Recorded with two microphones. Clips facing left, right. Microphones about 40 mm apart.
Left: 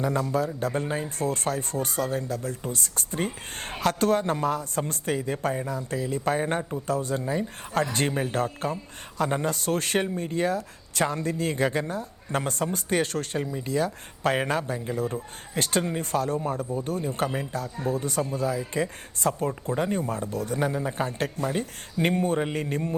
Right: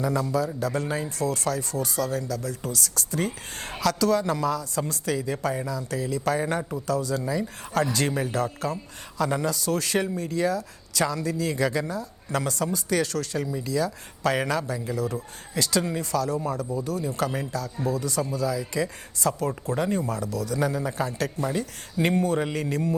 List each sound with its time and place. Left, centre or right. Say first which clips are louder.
0.0 s a man's voice: even; left